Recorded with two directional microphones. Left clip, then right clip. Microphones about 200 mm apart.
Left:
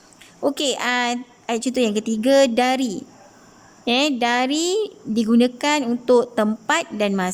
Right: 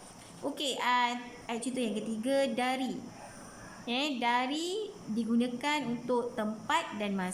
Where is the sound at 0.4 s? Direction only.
55° left (ahead or behind).